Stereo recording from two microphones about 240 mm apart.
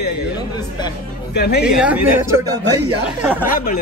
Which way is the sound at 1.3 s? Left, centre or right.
Left.